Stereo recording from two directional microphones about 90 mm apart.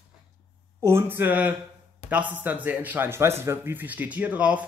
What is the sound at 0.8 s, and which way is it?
Speech, 25° right (ahead or behind).